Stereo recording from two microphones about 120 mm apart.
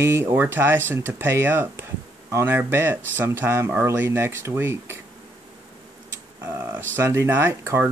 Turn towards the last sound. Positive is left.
turn(degrees=-20)  # may be behind; listen again after turning